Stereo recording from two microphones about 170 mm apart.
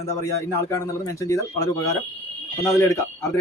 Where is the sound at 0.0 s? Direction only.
20° left (ahead or behind).